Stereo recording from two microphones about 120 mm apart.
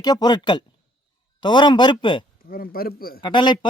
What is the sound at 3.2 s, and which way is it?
Speech, 40° left (ahead or behind).